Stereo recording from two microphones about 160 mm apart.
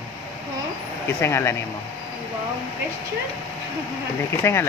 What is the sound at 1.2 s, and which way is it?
Speech, 15° left (ahead or behind).